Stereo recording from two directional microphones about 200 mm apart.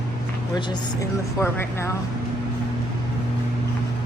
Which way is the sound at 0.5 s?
20° left (ahead or behind).